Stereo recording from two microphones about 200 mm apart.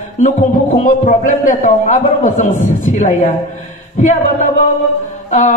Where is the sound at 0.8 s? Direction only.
40° left (ahead or behind).